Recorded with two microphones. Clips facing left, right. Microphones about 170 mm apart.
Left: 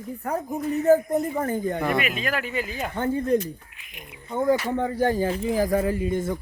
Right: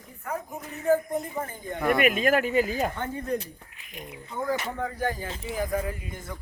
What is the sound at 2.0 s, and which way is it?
Speech, 50° right (ahead or behind).